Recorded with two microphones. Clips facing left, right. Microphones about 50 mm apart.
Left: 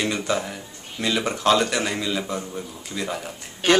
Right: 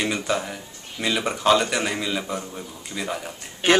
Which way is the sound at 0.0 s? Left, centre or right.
Centre.